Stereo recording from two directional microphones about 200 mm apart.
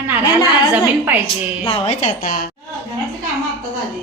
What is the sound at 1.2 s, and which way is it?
A woman's voice, 30° left (ahead or behind).